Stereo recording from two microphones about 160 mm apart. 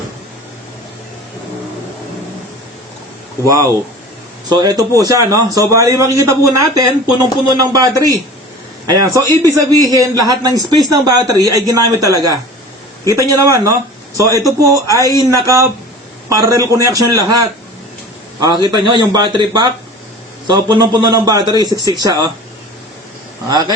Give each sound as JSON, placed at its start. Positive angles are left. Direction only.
{"t": 3.4, "sound": "a man's voice", "side_deg": -20}
{"t": 14.9, "sound": "speech", "side_deg": 20}
{"t": 15.2, "sound": "a man's voice", "side_deg": -20}
{"t": 23.5, "sound": "a man's voice", "side_deg": -25}